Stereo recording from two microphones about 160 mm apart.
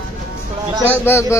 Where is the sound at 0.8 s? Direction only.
15° left (ahead or behind).